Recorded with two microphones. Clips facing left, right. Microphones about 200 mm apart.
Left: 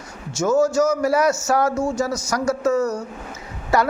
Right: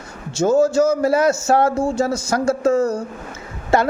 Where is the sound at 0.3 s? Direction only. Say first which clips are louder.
Right 3 dB; 30° right (ahead or behind).